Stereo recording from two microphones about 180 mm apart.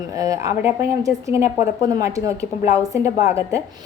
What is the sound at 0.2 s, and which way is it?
Speech, 15° right (ahead or behind).